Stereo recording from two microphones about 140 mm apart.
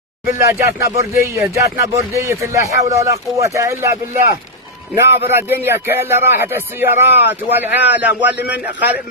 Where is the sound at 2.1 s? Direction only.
20° right (ahead or behind).